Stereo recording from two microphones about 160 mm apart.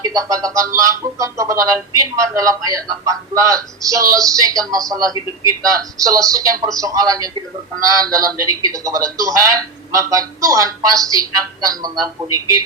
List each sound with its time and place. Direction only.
0.0 s a man's voice: 20° right (ahead or behind)